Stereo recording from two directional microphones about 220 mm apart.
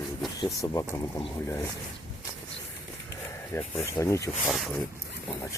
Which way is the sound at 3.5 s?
10° left (ahead or behind).